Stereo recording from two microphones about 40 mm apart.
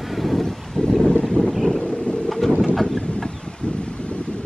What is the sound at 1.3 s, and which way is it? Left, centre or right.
Wind noise, left.